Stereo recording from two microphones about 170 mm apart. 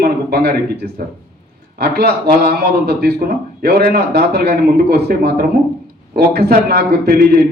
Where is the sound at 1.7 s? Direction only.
70° right (ahead or behind).